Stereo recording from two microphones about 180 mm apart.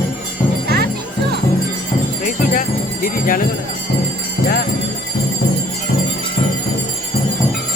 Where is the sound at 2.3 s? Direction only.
50° left (ahead or behind).